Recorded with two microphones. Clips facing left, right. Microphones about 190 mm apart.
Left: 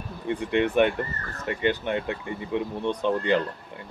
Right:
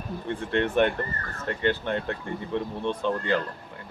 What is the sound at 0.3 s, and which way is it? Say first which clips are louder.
Speech: left 3 dB; 15° left (ahead or behind).